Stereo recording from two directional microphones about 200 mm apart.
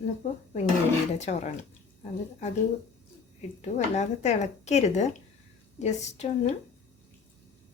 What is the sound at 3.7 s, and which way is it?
A woman's voice, 35° left (ahead or behind).